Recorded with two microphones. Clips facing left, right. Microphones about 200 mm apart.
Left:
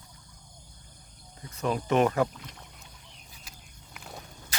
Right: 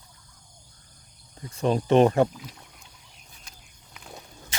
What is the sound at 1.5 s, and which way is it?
Speech, 30° right (ahead or behind).